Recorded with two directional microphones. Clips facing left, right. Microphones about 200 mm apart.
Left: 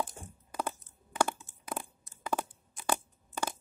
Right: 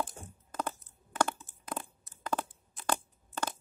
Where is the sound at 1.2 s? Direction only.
10° left (ahead or behind).